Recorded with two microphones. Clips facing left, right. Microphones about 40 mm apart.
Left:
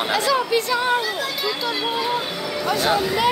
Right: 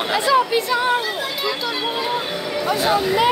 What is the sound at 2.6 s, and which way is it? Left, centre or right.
Speech, centre.